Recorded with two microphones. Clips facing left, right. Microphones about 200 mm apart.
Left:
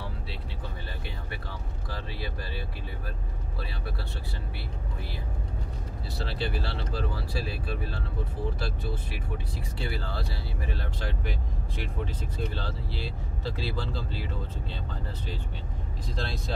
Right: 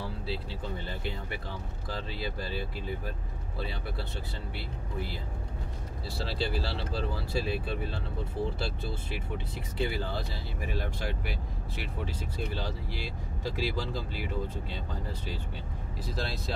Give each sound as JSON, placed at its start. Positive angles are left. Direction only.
{"t": 1.9, "sound": "speech", "side_deg": -25}
{"t": 6.1, "sound": "speech", "side_deg": -30}
{"t": 9.8, "sound": "speech", "side_deg": -20}
{"t": 16.2, "sound": "speech", "side_deg": 0}